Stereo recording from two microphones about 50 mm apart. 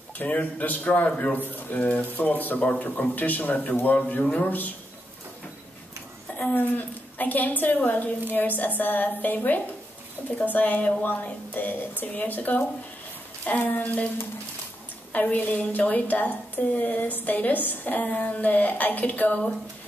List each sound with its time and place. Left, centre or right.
0.2 s a woman's voice: left
6.3 s a woman's voice: left
15.1 s a woman's voice: left